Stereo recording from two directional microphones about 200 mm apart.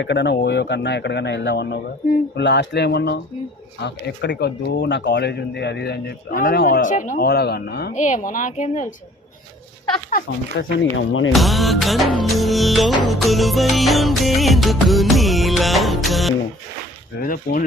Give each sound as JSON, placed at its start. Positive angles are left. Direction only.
{"t": 0.0, "sound": "speech", "side_deg": 60}
{"t": 7.9, "sound": "speech", "side_deg": 35}
{"t": 10.6, "sound": "speech", "side_deg": 70}
{"t": 11.3, "sound": "music", "side_deg": 0}
{"t": 17.2, "sound": "speech", "side_deg": 45}